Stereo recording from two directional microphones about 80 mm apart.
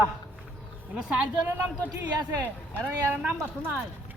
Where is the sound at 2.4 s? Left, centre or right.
Right.